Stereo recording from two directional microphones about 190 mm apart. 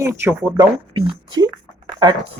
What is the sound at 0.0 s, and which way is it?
Speech, 15° right (ahead or behind).